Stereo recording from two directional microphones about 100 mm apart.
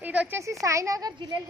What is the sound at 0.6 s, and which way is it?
Speech, 30° right (ahead or behind).